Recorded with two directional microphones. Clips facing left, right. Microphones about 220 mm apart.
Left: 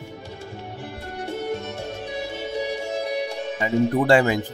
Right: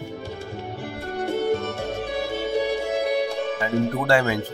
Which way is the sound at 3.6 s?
20° left (ahead or behind).